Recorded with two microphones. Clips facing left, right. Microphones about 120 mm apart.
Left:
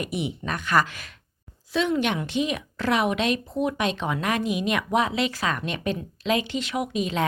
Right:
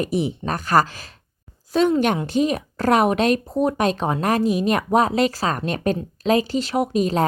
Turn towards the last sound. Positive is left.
turn(degrees=-40)  # may be behind; listen again after turning